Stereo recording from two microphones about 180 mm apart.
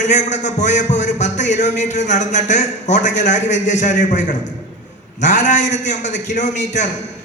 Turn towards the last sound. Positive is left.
turn(degrees=40)  # may be behind; listen again after turning